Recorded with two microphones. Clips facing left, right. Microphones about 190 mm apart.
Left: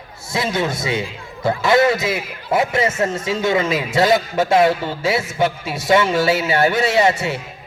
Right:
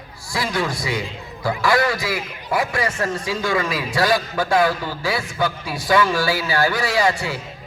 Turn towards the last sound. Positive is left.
turn(degrees=25)  # may be behind; listen again after turning